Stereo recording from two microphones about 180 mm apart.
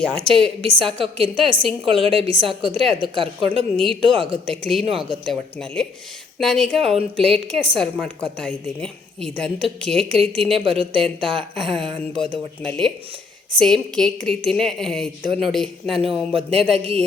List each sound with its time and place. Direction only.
0.0 s a woman's voice: 5° left (ahead or behind)
0.8 s a woman's voice: 30° right (ahead or behind)
4.4 s a woman's voice: 5° left (ahead or behind)
4.8 s speech: 30° right (ahead or behind)
5.2 s a woman's voice: 5° left (ahead or behind)
10.6 s speech: 30° right (ahead or behind)
10.9 s a woman's voice: 5° left (ahead or behind)
11.3 s a woman's voice: 30° right (ahead or behind)
12.6 s a woman's voice: 5° left (ahead or behind)
16.0 s speech: 30° right (ahead or behind)